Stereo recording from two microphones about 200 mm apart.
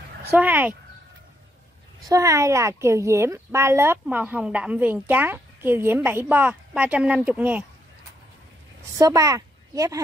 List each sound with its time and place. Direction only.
0.3 s a woman's voice: 10° right (ahead or behind)
2.0 s a woman's voice: 15° right (ahead or behind)
8.9 s a woman's voice: 15° right (ahead or behind)